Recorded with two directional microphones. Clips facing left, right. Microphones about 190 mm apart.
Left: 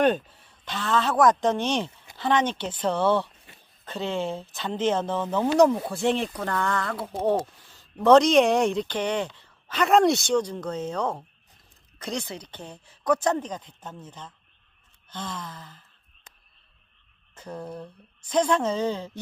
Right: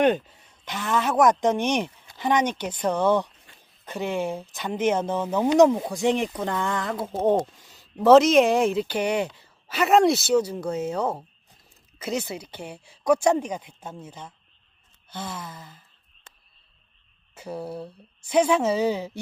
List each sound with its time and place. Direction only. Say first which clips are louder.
0.0 s speech: right 1 dB; 15° right (ahead or behind)
17.3 s speech: right 3 dB; 10° right (ahead or behind)